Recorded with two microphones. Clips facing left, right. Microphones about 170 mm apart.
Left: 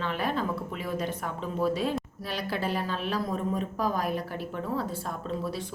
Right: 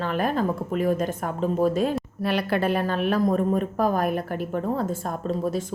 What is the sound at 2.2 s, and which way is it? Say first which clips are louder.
A woman's voice: right 8 dB; 60° right (ahead or behind).